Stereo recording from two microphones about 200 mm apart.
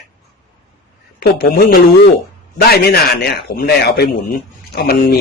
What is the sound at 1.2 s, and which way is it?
Speech, 50° left (ahead or behind).